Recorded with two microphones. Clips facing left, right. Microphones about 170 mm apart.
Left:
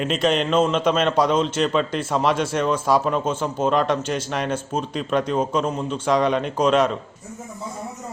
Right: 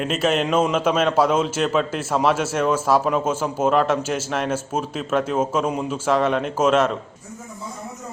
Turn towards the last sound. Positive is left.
turn(degrees=0)  # may be behind; listen again after turning